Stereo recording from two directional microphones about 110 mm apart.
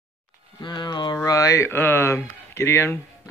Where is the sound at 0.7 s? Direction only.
40° left (ahead or behind).